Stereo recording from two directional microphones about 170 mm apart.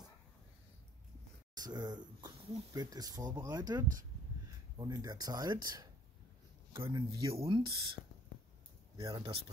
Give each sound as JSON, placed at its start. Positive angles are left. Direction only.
{"t": 1.5, "sound": "speech", "side_deg": -25}
{"t": 7.3, "sound": "speech", "side_deg": -30}
{"t": 8.9, "sound": "speech", "side_deg": -20}